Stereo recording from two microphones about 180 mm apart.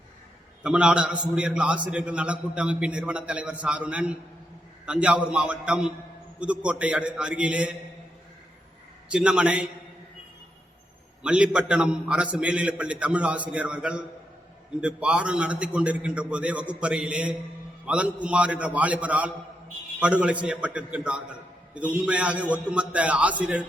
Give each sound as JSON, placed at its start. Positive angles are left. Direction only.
{"t": 0.6, "sound": "a man's voice", "side_deg": -5}
{"t": 9.0, "sound": "a man's voice", "side_deg": -5}
{"t": 11.2, "sound": "a man's voice", "side_deg": -5}